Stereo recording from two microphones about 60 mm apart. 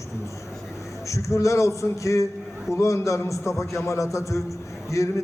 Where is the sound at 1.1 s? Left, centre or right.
Left.